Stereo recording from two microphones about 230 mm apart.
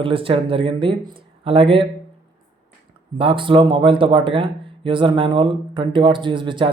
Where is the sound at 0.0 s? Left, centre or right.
Right.